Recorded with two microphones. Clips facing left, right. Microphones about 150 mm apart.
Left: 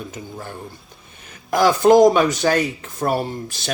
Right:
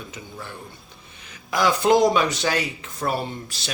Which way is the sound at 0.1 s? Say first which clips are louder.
Left 4 dB; 45° left (ahead or behind).